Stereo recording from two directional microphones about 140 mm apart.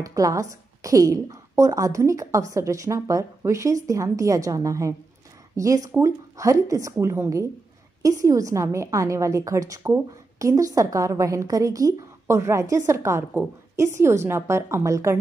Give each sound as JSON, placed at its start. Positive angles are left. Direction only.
{"t": 0.0, "sound": "a woman's voice", "side_deg": -25}